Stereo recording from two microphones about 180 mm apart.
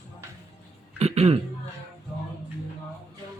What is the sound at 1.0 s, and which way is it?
Cough, 35° right (ahead or behind).